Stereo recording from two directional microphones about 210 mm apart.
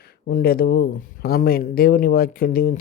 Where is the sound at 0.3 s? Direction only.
45° left (ahead or behind).